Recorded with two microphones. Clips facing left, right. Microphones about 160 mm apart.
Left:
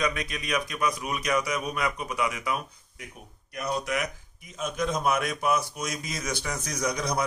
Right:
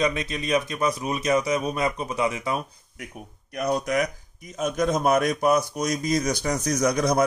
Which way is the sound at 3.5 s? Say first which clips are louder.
Right 6 dB; 45° right (ahead or behind).